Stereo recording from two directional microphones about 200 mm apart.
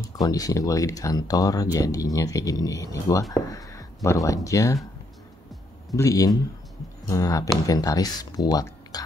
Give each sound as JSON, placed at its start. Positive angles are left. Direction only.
{"t": 0.2, "sound": "speech", "side_deg": 15}
{"t": 5.9, "sound": "speech", "side_deg": 15}